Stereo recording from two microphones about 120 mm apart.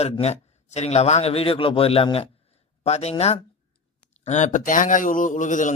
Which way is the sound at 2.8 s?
60° left (ahead or behind).